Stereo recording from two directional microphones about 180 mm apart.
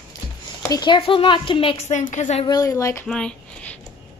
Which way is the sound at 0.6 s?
20° left (ahead or behind).